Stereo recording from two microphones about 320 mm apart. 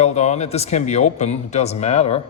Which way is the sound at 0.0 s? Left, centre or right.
Left.